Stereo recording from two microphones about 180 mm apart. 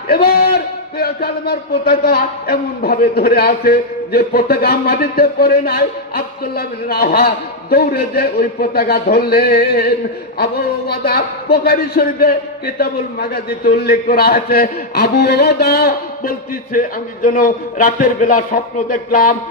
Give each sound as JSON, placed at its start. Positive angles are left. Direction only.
{"t": 0.1, "sound": "a man's voice", "side_deg": 55}
{"t": 16.7, "sound": "a man's voice", "side_deg": 50}